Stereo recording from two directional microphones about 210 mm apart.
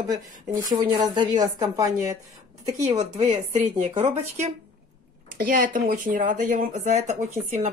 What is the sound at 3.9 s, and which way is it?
Speech, 35° right (ahead or behind).